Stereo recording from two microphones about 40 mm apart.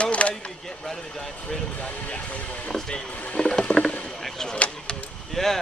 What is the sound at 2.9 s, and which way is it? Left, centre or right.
Rowboat, left.